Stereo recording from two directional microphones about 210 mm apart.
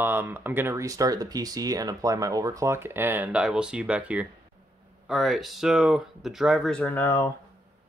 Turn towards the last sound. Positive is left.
turn(degrees=10)  # may be behind; listen again after turning